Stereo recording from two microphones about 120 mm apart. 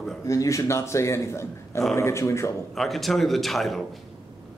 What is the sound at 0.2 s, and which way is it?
A man's voice, 25° left (ahead or behind).